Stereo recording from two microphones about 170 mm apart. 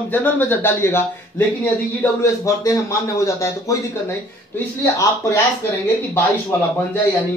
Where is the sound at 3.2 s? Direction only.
20° left (ahead or behind).